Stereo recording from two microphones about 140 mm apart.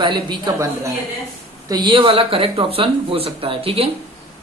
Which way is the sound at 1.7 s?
35° right (ahead or behind).